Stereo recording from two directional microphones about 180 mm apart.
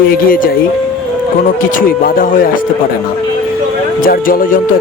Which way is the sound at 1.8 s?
50° left (ahead or behind).